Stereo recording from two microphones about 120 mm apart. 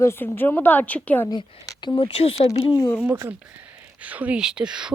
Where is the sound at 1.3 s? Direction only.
35° left (ahead or behind).